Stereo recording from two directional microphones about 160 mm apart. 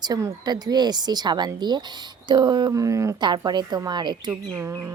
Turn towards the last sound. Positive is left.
turn(degrees=-15)  # may be behind; listen again after turning